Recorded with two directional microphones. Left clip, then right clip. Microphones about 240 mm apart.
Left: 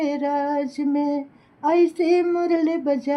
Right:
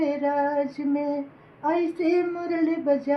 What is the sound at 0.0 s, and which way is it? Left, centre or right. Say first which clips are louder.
Female singing: left 1 dB; left.